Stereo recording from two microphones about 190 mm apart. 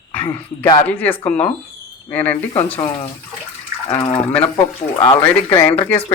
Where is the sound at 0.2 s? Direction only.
30° left (ahead or behind).